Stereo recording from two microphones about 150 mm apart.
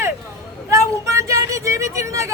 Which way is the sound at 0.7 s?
20° right (ahead or behind).